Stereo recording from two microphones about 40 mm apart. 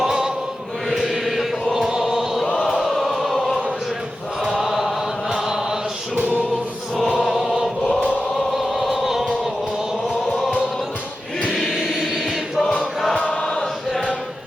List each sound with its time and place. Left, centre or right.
0.0 s choir: centre
0.9 s chant: centre
2.6 s choir: centre
4.5 s chant: centre
6.1 s music: right
6.9 s chant: centre
8.5 s opera: centre
11.7 s choir: centre
13.1 s choir: left